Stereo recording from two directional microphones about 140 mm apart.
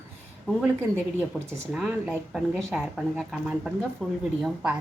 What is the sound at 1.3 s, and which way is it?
Speech, 5° right (ahead or behind).